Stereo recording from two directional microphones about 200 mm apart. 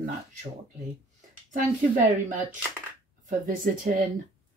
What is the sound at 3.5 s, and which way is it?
Speech, 45° right (ahead or behind).